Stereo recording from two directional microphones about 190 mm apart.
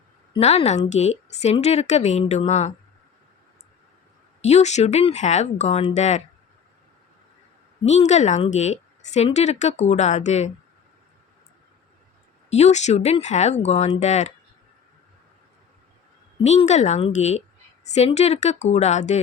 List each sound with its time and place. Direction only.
0.3 s a woman's voice: 35° left (ahead or behind)
4.4 s a woman's voice: 35° left (ahead or behind)
7.9 s a woman's voice: 35° left (ahead or behind)
12.5 s a woman's voice: 35° left (ahead or behind)
16.4 s a woman's voice: 35° left (ahead or behind)